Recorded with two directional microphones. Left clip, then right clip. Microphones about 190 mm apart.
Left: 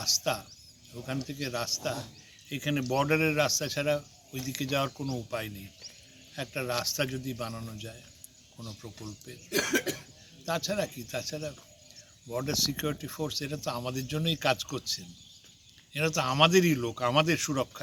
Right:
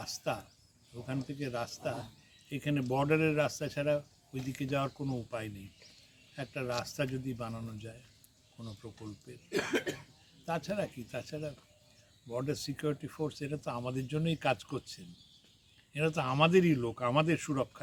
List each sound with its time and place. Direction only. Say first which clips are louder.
0.0 s speech: left 8 dB; 5° right (ahead or behind)
9.5 s speech: left 5 dB; 60° left (ahead or behind)
10.4 s speech: left 4 dB; 5° right (ahead or behind)